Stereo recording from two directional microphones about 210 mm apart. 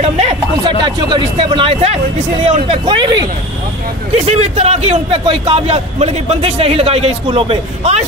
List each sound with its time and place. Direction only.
0.7 s a man's voice: 20° right (ahead or behind)
4.4 s a man's voice: 30° right (ahead or behind)